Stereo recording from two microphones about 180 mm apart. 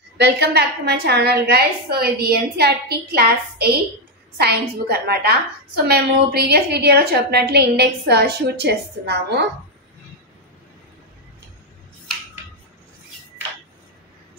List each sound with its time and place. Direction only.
0.2 s a woman's voice: 65° right (ahead or behind)